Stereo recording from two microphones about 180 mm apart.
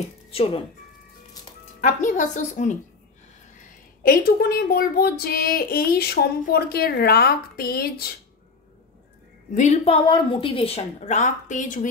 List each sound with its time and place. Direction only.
0.3 s speech: 35° left (ahead or behind)
1.8 s a woman's voice: 45° left (ahead or behind)
4.0 s speech: 55° left (ahead or behind)
9.5 s a woman's voice: 40° left (ahead or behind)
10.0 s a woman's voice: 25° left (ahead or behind); by 11.9 s 45° left (ahead or behind)